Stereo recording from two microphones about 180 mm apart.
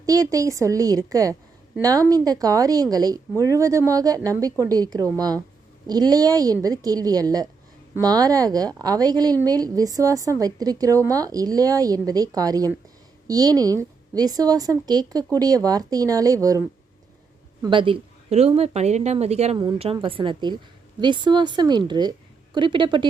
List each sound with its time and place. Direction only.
0.0 s a woman's voice: 20° right (ahead or behind)